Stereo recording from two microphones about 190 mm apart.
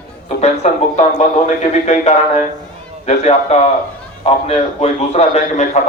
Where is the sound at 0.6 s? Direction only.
35° left (ahead or behind).